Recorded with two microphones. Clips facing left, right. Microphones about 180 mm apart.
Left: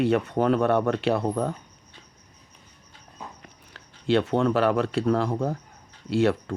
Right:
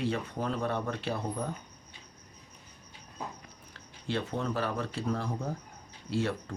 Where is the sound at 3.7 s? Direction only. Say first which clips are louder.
Left 12 dB; 75° left (ahead or behind).